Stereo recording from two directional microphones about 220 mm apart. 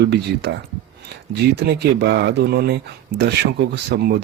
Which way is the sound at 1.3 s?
50° right (ahead or behind).